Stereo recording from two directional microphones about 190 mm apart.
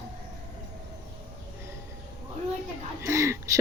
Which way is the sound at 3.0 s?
15° right (ahead or behind).